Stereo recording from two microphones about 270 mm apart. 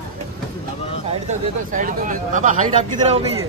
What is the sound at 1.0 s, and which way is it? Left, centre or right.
Speech, right.